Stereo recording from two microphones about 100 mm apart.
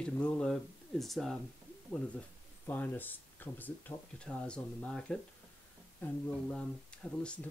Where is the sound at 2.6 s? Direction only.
20° left (ahead or behind).